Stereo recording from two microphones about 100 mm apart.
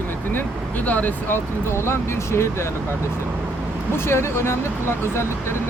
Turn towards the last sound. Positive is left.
turn(degrees=25)  # may be behind; listen again after turning